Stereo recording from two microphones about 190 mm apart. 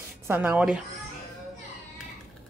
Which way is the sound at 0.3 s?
10° right (ahead or behind).